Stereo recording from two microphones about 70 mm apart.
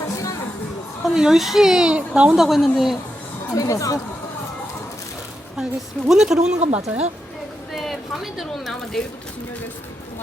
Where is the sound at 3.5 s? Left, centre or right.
Left.